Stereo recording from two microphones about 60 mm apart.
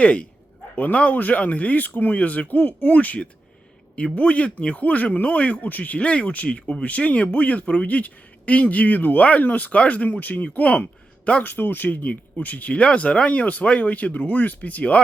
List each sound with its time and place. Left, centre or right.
0.0 s speech: left
11.5 s speech: left